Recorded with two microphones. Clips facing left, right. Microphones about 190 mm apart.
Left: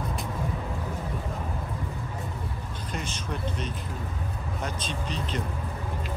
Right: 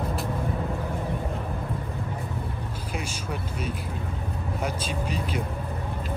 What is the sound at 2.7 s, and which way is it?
Speech, 10° right (ahead or behind).